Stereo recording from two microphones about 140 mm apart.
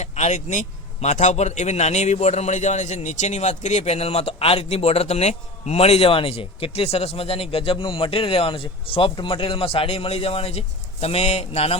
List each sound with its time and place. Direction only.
0.0 s a man's voice: 55° left (ahead or behind)